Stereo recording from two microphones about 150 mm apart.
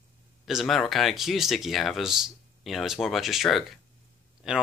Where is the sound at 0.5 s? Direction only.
Centre (ahead or behind).